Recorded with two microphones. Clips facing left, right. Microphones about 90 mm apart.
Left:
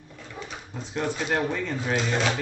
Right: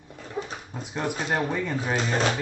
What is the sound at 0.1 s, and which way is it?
Dog, 35° right (ahead or behind).